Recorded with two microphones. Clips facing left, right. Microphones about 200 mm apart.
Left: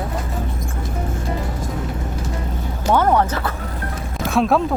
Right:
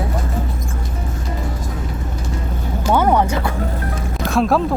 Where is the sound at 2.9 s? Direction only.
10° right (ahead or behind).